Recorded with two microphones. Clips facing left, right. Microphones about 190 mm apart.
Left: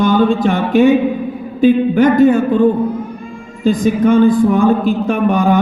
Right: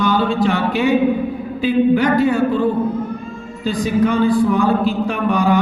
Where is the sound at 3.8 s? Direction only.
50° left (ahead or behind).